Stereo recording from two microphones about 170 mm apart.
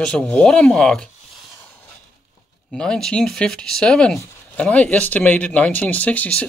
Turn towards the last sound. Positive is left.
turn(degrees=10)  # may be behind; listen again after turning